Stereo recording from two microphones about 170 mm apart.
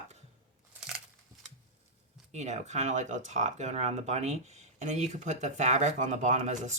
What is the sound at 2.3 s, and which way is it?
Speech, 40° right (ahead or behind).